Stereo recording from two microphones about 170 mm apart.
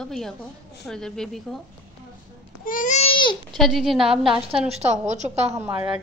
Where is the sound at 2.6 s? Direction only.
50° left (ahead or behind); by 3.4 s 30° left (ahead or behind).